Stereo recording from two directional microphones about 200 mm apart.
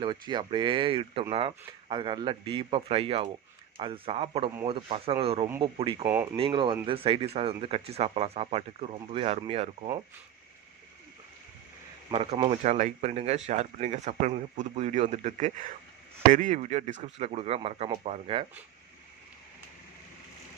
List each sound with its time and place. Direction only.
0.0 s speech: 20° right (ahead or behind)
12.1 s speech: 30° right (ahead or behind)